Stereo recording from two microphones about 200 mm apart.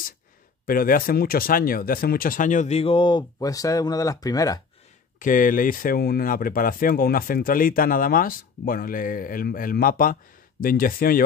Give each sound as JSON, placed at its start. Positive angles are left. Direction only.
{"t": 0.7, "sound": "speech", "side_deg": 45}
{"t": 5.2, "sound": "speech", "side_deg": 40}